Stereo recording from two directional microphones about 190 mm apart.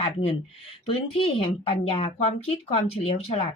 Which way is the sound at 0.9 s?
30° left (ahead or behind).